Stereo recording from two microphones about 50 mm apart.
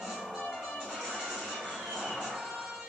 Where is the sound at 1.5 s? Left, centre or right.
Centre.